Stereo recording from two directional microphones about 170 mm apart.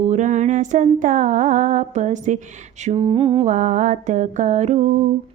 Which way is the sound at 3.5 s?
50° right (ahead or behind).